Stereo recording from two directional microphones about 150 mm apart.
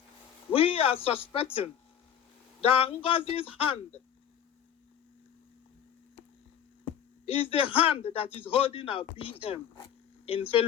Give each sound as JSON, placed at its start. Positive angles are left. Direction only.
{"t": 0.5, "sound": "a sound", "side_deg": 40}
{"t": 2.6, "sound": "speech", "side_deg": 40}
{"t": 7.3, "sound": "speech", "side_deg": 40}